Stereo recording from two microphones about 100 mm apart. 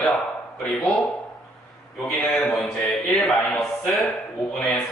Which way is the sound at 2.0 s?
5° left (ahead or behind).